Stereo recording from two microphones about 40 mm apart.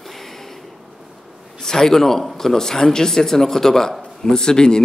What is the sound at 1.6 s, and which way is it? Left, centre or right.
A man's voice, centre.